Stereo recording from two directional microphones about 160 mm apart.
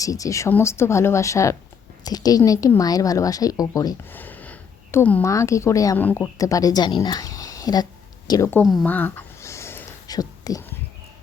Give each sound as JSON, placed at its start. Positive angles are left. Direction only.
{"t": 0.0, "sound": "speech", "side_deg": 20}
{"t": 4.1, "sound": "a sound", "side_deg": 10}
{"t": 5.3, "sound": "speech", "side_deg": 20}
{"t": 6.1, "sound": "speech", "side_deg": 10}
{"t": 6.3, "sound": "a woman's voice", "side_deg": 20}
{"t": 8.8, "sound": "whispering", "side_deg": 10}